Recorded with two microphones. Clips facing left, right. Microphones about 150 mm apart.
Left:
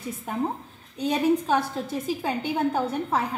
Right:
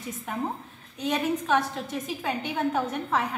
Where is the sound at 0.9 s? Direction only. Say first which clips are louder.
Left 4 dB; 35° left (ahead or behind).